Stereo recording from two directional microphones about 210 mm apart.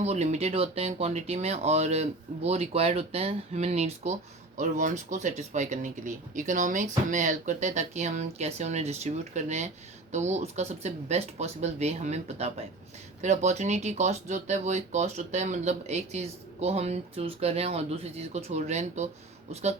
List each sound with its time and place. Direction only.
0.0 s speech: 30° right (ahead or behind)